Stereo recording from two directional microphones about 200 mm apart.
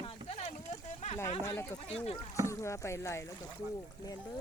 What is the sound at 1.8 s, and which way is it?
Speech, 30° left (ahead or behind).